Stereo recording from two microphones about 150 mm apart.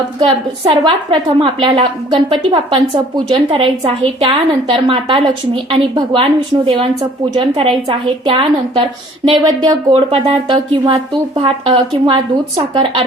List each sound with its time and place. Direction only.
0.2 s a woman's voice: 35° right (ahead or behind)